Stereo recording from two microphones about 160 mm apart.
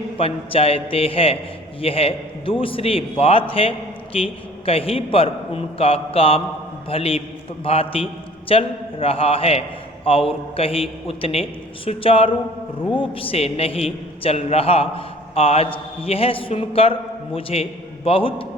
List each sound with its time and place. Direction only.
0.2 s a man's voice: 35° left (ahead or behind)